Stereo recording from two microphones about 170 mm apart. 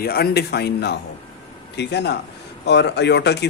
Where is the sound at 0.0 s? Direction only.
65° left (ahead or behind).